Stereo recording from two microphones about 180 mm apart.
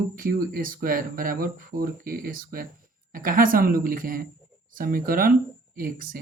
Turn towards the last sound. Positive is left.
turn(degrees=-50)  # may be behind; listen again after turning